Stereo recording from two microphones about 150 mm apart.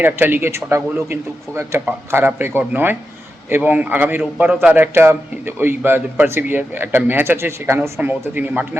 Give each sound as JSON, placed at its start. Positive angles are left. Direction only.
{"t": 0.0, "sound": "a man's voice", "side_deg": -15}